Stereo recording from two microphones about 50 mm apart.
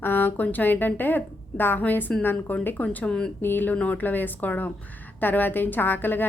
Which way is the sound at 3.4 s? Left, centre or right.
Left.